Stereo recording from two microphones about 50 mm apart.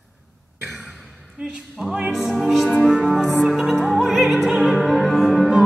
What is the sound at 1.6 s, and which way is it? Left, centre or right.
Music, centre.